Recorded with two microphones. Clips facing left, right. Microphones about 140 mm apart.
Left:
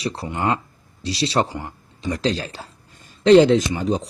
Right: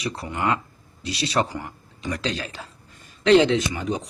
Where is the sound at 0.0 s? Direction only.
30° left (ahead or behind).